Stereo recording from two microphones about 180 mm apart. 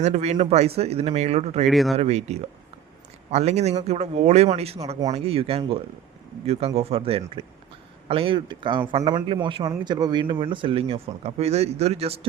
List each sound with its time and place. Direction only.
0.0 s speech: 40° right (ahead or behind)
1.6 s speech: centre (ahead or behind)
2.0 s speech: 35° right (ahead or behind)